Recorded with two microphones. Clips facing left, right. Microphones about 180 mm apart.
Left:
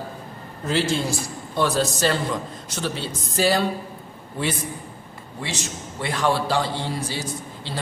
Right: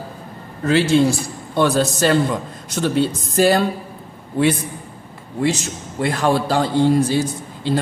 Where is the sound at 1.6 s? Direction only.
55° right (ahead or behind).